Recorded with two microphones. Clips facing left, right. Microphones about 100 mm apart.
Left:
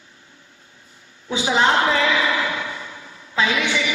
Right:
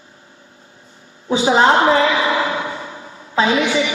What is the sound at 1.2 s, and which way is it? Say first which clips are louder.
Speech: right 5 dB; 35° right (ahead or behind).